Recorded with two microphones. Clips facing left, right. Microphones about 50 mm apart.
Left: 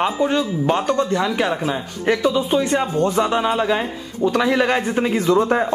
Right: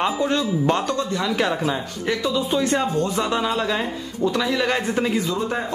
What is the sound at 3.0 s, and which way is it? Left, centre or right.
A man's voice, left.